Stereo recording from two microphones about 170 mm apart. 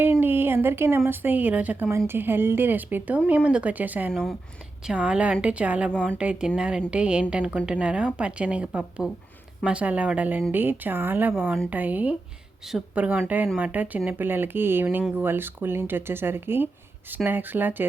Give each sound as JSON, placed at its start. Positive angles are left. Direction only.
{"t": 0.0, "sound": "a woman's voice", "side_deg": -10}
{"t": 4.1, "sound": "speech", "side_deg": 5}